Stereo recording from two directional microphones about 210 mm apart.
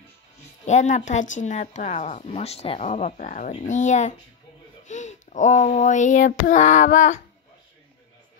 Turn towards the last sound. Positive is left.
turn(degrees=35)  # may be behind; listen again after turning